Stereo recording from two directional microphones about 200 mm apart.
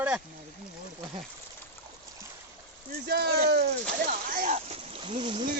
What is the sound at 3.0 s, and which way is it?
Speech, 50° right (ahead or behind).